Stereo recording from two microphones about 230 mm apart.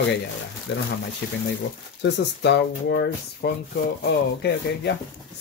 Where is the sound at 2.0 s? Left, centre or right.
Left.